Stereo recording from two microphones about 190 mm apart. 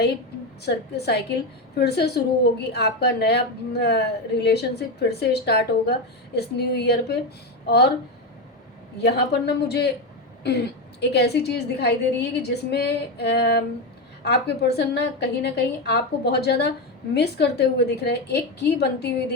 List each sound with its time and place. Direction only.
0.6 s a woman's voice: 60° left (ahead or behind)
9.0 s a woman's voice: 60° left (ahead or behind)